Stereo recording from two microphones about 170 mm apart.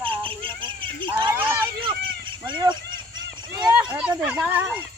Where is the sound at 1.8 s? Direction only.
30° right (ahead or behind).